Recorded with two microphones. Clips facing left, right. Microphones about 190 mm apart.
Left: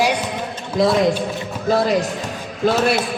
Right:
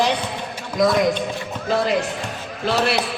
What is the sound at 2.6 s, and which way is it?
Speech, 45° left (ahead or behind).